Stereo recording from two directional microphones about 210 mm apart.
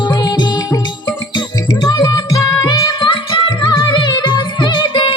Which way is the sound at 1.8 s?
20° left (ahead or behind).